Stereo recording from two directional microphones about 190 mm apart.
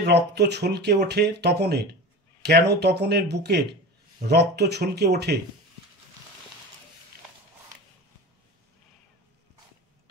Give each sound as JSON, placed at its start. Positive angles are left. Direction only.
{"t": 0.0, "sound": "speech", "side_deg": -60}